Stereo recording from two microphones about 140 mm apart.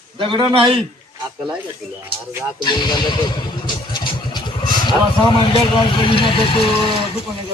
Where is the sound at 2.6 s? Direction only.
30° left (ahead or behind).